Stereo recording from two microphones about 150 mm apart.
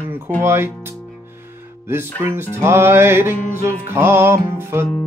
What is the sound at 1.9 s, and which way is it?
Music, 15° right (ahead or behind).